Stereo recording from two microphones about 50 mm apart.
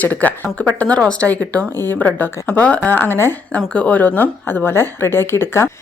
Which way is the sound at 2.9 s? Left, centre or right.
Left.